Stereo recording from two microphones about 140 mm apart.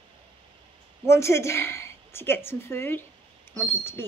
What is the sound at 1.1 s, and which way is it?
Speech, 20° left (ahead or behind).